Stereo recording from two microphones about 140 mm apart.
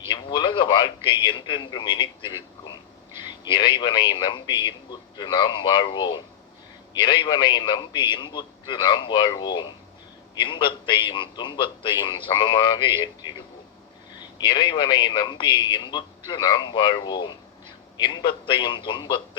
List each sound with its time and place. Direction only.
0.1 s a man's voice: 35° left (ahead or behind)
3.1 s a sound: 15° right (ahead or behind)
3.4 s a man's voice: 35° left (ahead or behind)